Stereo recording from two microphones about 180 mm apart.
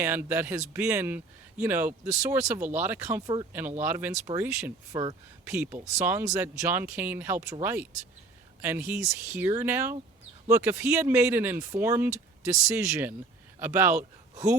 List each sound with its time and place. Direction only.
0.0 s speech: 10° right (ahead or behind)